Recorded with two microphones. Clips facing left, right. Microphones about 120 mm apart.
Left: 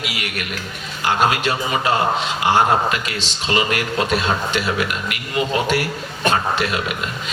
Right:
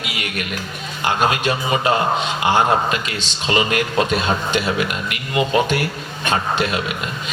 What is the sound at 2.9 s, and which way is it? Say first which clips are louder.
A man's voice: even; 25° right (ahead or behind).